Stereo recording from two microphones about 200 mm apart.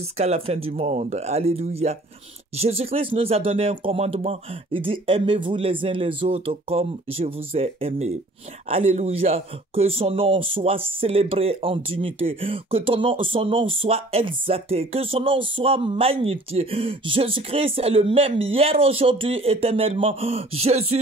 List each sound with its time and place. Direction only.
0.2 s speech: 35° right (ahead or behind)